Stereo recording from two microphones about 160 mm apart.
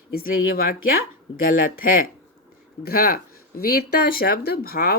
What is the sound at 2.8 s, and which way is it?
Speech, 70° left (ahead or behind).